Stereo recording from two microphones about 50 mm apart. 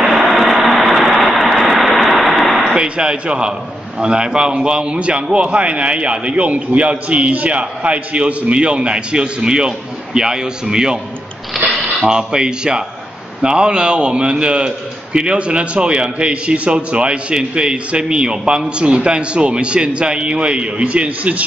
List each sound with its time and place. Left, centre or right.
0.0 s vehicle: centre
2.7 s a man's voice: centre
12.0 s a man's voice: centre